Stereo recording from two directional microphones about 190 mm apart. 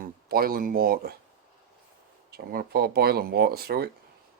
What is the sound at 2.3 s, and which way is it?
Speech, 55° right (ahead or behind).